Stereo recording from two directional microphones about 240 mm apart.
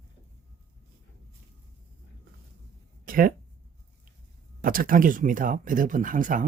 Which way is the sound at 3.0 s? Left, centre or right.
Right.